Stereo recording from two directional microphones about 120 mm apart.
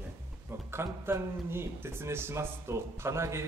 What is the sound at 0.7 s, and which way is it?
Speech, 20° right (ahead or behind).